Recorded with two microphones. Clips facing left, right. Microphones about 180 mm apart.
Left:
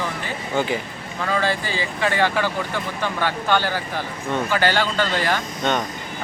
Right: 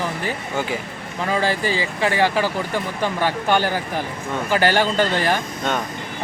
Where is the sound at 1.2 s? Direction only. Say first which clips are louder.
Right 2 dB; 15° right (ahead or behind).